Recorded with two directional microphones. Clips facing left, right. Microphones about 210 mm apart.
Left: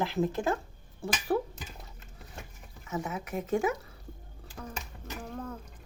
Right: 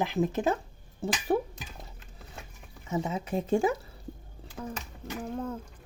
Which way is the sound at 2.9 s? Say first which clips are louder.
Right 4 dB; 25° right (ahead or behind).